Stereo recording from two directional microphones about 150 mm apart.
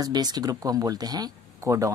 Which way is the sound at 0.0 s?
25° right (ahead or behind).